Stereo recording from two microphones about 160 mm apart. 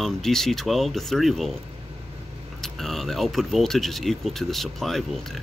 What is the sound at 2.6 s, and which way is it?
Speech, centre (ahead or behind).